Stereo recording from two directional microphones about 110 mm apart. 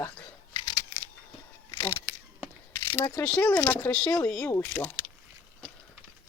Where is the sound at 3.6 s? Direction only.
20° left (ahead or behind).